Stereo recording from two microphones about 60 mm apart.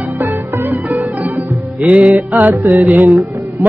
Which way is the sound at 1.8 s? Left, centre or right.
Right.